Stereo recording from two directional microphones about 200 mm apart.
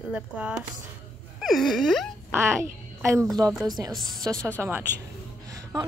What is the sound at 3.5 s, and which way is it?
A woman's voice, centre (ahead or behind).